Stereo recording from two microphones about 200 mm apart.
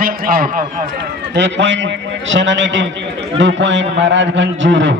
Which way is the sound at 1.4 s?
65° right (ahead or behind).